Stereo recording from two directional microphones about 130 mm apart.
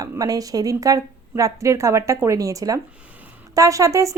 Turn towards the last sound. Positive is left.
turn(degrees=-25)  # may be behind; listen again after turning